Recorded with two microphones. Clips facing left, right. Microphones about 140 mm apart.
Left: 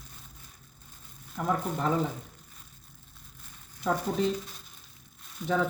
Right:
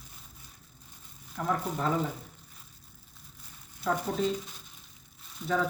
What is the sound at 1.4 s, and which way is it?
Speech, 10° left (ahead or behind).